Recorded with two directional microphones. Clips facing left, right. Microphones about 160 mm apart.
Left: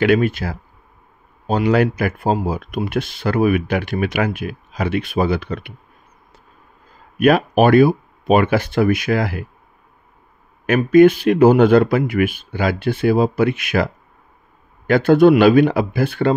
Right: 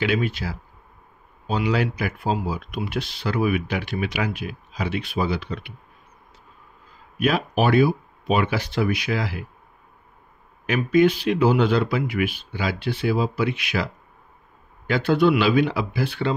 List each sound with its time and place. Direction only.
0.0 s speech: 50° left (ahead or behind)
7.2 s speech: 55° left (ahead or behind)
10.7 s speech: 50° left (ahead or behind)
14.9 s speech: 50° left (ahead or behind)